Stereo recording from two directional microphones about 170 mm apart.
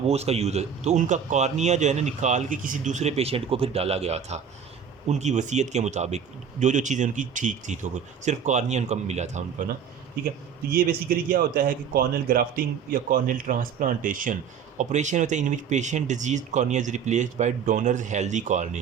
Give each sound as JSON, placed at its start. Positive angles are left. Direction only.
{"t": 0.1, "sound": "a man's voice", "side_deg": -40}
{"t": 10.7, "sound": "speech", "side_deg": -60}